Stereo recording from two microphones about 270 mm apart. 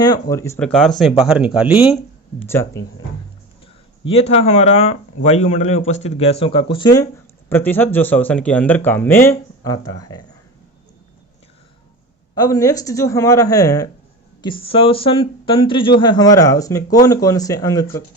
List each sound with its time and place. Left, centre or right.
0.0 s a man's voice: centre
2.4 s speech: centre
4.0 s speech: left
12.3 s speech: centre